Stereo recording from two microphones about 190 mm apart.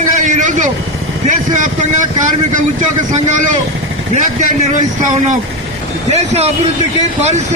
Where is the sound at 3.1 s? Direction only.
40° right (ahead or behind).